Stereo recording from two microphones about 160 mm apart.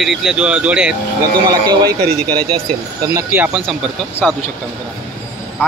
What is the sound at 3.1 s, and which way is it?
Speech, 10° right (ahead or behind).